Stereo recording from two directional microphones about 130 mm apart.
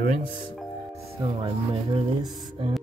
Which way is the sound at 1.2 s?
40° right (ahead or behind).